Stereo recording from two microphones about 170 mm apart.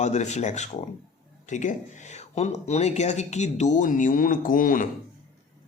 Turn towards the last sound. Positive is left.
turn(degrees=50)  # may be behind; listen again after turning